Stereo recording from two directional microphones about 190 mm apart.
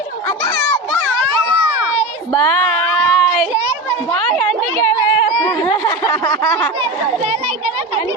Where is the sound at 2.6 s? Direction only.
Centre (ahead or behind).